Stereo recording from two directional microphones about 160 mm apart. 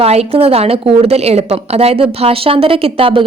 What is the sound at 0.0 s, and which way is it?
A woman's voice, 40° right (ahead or behind).